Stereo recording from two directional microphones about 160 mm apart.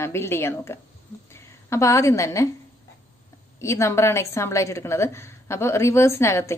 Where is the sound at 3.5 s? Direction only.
15° left (ahead or behind).